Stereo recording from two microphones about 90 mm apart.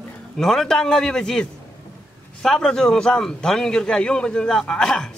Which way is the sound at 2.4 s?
5° left (ahead or behind).